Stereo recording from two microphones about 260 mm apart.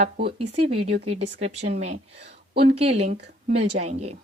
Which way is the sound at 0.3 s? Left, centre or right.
Right.